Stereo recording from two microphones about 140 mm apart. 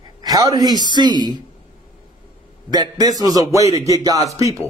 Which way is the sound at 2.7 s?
25° right (ahead or behind).